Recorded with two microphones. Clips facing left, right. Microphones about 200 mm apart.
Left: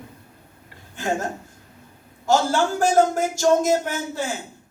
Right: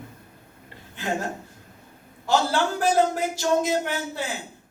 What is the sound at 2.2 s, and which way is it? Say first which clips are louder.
A woman's voice: left 3 dB; 45° left (ahead or behind).